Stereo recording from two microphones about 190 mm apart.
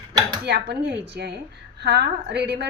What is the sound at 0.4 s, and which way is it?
A woman's voice, 60° right (ahead or behind).